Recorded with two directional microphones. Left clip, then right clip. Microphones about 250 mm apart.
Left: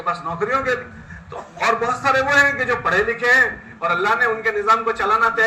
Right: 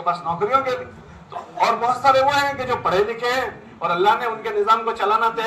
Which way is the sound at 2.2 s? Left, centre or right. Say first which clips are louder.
Left 3 dB; left.